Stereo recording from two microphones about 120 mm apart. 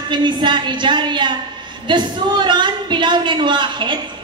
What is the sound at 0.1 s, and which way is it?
A woman's voice, 40° right (ahead or behind).